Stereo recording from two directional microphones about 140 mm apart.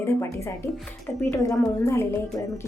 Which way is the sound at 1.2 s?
20° left (ahead or behind).